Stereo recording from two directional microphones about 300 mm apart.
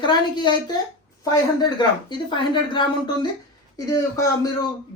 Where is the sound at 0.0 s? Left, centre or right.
Centre.